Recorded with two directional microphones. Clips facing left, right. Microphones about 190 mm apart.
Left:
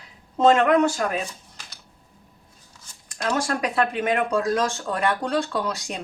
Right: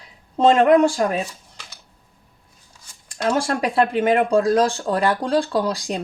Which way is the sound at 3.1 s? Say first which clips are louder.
Right 4 dB; 30° right (ahead or behind).